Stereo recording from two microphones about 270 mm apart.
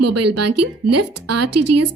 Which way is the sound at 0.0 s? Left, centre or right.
Right.